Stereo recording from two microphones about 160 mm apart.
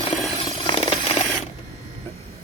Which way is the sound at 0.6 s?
35° left (ahead or behind).